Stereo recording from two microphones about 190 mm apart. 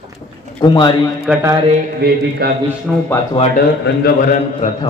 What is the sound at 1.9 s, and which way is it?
Speech, 55° right (ahead or behind).